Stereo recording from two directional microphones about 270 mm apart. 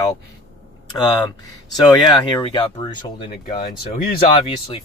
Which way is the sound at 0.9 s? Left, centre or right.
Centre.